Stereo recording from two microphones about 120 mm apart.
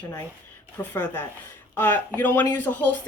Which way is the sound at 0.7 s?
15° left (ahead or behind).